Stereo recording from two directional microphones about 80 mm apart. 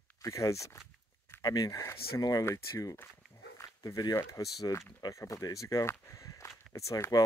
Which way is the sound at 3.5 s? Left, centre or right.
Left.